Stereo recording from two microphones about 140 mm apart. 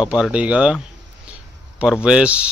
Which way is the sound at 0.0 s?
5° right (ahead or behind).